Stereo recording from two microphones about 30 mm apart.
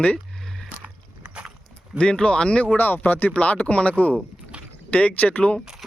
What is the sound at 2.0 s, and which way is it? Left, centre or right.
Speech, left.